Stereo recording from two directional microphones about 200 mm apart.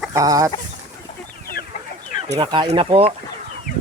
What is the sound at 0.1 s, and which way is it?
Chicken, 15° right (ahead or behind).